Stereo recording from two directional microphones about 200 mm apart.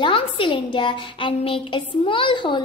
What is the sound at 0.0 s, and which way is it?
A woman's voice, 25° left (ahead or behind).